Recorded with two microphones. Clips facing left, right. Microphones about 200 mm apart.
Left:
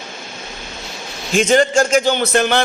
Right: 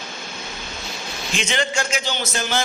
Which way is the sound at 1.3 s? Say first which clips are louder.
Left 11 dB; 45° left (ahead or behind).